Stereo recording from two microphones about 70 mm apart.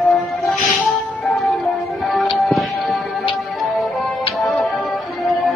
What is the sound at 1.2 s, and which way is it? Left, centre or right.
Music, centre.